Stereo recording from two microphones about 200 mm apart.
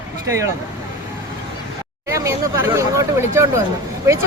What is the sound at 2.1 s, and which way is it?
Speech, 15° right (ahead or behind).